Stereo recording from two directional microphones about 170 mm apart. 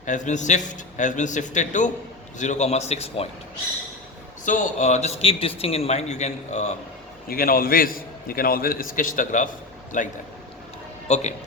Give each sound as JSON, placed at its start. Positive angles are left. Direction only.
{"t": 0.0, "sound": "a man's voice", "side_deg": 45}
{"t": 4.4, "sound": "a man's voice", "side_deg": 50}
{"t": 7.3, "sound": "a man's voice", "side_deg": 60}
{"t": 11.1, "sound": "a man's voice", "side_deg": 40}